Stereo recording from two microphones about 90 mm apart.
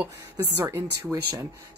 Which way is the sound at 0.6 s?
30° right (ahead or behind).